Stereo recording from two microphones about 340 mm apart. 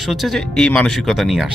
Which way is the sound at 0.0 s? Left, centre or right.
Centre.